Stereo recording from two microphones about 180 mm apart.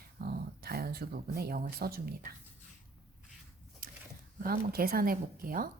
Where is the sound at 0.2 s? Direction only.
55° right (ahead or behind).